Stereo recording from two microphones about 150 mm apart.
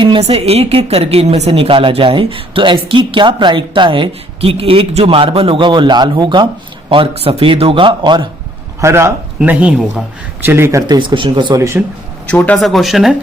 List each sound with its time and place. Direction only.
0.0 s a woman's voice: 35° right (ahead or behind)
8.8 s speech: 20° right (ahead or behind)
10.9 s a woman's voice: 30° right (ahead or behind)
12.3 s speech: 5° left (ahead or behind)